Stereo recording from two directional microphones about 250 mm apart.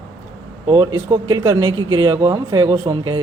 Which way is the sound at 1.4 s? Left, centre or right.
Centre.